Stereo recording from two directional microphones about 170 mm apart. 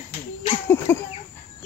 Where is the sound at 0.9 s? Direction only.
15° left (ahead or behind).